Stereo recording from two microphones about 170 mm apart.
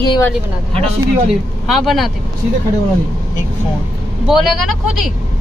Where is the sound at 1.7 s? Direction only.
Centre (ahead or behind).